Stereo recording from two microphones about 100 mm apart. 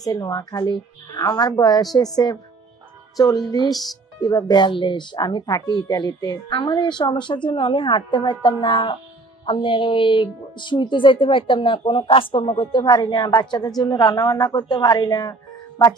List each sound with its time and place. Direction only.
0.0 s a woman's voice: 40° left (ahead or behind)
3.2 s a woman's voice: 40° left (ahead or behind)